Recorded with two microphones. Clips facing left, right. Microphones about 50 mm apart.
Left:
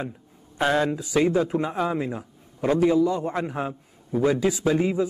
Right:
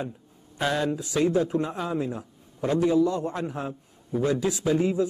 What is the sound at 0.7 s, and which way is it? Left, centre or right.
A man's voice, left.